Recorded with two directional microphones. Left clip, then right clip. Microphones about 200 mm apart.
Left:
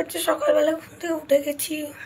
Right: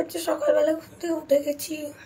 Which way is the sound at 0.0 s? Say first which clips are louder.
Left 2 dB; centre (ahead or behind).